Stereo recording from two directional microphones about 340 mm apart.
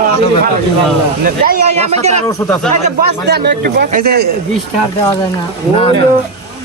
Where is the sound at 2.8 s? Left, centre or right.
Right.